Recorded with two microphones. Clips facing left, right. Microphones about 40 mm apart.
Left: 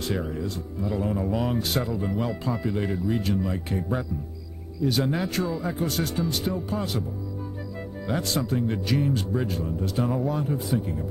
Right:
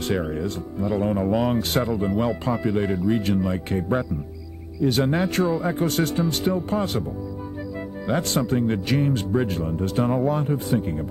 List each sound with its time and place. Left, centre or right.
0.1 s speech: right
4.8 s speech: right
8.3 s speech: right